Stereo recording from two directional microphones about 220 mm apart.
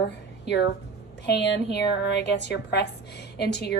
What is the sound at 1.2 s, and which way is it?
A woman's voice, 50° left (ahead or behind).